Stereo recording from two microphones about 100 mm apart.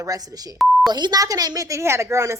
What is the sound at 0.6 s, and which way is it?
Beep, centre (ahead or behind).